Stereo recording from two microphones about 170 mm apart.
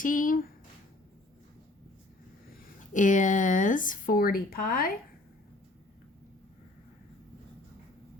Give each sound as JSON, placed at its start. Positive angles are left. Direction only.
{"t": 0.0, "sound": "speech", "side_deg": 50}
{"t": 2.9, "sound": "speech", "side_deg": 50}